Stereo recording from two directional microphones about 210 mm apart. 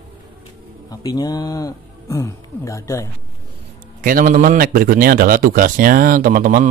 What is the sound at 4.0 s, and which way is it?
Speech, 40° right (ahead or behind).